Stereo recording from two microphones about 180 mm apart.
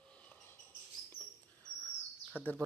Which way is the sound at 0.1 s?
5° left (ahead or behind).